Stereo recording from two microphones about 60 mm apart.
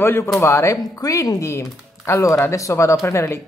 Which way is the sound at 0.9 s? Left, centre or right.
Left.